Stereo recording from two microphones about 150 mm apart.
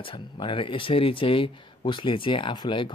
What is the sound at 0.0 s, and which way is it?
Speech, 35° left (ahead or behind).